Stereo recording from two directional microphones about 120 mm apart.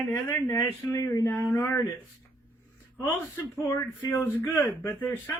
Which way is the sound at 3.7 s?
20° left (ahead or behind).